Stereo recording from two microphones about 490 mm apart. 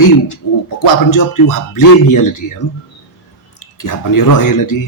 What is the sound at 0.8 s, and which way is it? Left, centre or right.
Speech, left.